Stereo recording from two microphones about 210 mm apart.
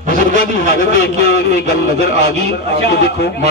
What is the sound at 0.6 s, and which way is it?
A man's voice, 45° left (ahead or behind).